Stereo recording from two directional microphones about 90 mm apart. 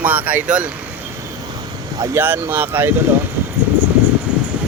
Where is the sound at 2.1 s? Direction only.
25° right (ahead or behind).